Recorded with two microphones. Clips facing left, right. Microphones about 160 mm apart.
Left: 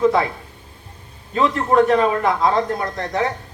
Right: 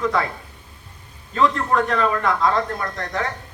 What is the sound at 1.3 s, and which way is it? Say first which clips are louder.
Speech: left 3 dB; 25° left (ahead or behind).